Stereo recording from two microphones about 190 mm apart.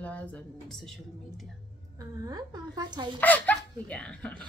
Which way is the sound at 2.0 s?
20° right (ahead or behind).